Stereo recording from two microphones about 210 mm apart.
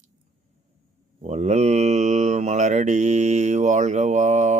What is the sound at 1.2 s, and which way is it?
Mantra, 30° right (ahead or behind).